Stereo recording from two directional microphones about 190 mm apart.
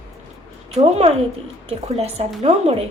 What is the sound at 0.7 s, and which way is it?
A woman's voice, 35° right (ahead or behind).